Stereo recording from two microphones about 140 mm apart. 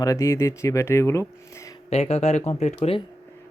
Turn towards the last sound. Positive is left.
turn(degrees=45)  # may be behind; listen again after turning